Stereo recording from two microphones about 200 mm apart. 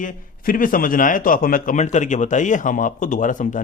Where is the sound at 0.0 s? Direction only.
40° left (ahead or behind).